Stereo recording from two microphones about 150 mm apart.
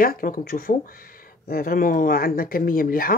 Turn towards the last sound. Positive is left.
turn(degrees=70)  # may be behind; listen again after turning